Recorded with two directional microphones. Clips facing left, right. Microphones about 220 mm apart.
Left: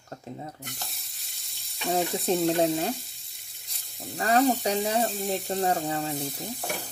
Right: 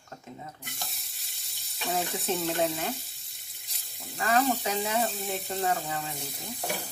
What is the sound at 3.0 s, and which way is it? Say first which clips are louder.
Frying: left 3 dB; centre (ahead or behind).